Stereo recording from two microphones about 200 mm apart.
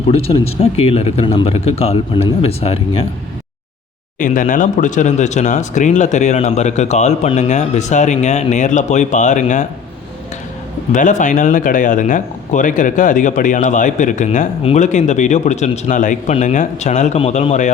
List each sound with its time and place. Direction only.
0.1 s speech: 30° left (ahead or behind)
4.2 s speech: 40° left (ahead or behind)
10.9 s speech: 40° left (ahead or behind)